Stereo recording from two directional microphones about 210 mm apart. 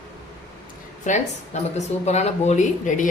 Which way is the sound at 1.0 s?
35° left (ahead or behind).